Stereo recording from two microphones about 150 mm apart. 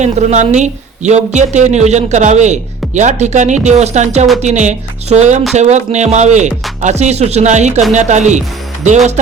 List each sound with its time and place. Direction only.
0.0 s a woman's voice: 50° right (ahead or behind)